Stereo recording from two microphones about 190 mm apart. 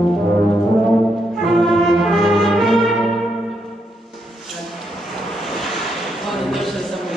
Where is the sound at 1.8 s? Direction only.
Centre (ahead or behind).